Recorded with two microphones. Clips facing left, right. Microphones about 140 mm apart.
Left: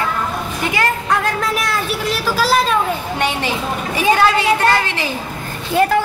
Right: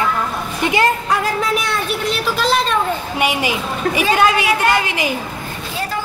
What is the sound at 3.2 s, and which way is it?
A woman's voice, 10° right (ahead or behind).